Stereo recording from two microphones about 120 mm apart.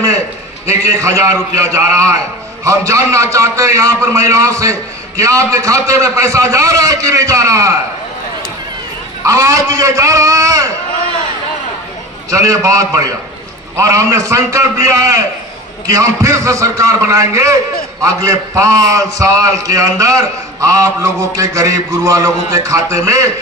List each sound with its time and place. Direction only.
0.7 s a man's voice: 25° right (ahead or behind)
9.2 s a man's voice: 25° right (ahead or behind)
12.3 s a man's voice: 30° right (ahead or behind)